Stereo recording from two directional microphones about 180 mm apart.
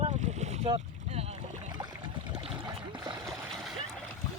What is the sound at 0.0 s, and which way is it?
Boat, 35° right (ahead or behind).